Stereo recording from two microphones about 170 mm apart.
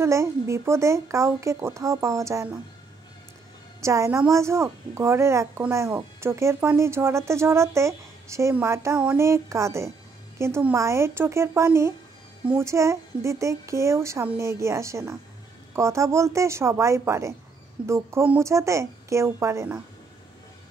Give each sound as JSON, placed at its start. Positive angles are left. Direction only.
{"t": 0.0, "sound": "speech", "side_deg": -15}
{"t": 3.8, "sound": "speech", "side_deg": -15}